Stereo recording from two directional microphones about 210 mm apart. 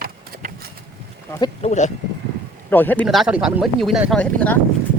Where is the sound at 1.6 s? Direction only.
35° left (ahead or behind).